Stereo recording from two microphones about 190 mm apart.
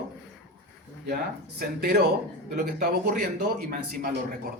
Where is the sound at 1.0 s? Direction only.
55° right (ahead or behind).